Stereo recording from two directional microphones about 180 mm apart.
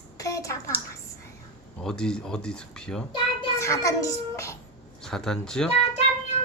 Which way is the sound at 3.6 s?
15° left (ahead or behind).